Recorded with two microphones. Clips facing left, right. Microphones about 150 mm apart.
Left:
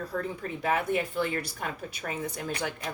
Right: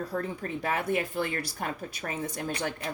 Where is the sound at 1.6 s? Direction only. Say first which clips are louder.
Right 1 dB; 40° right (ahead or behind).